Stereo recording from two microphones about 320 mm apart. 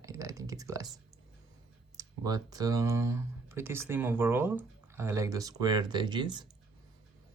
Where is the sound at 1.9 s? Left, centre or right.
Centre.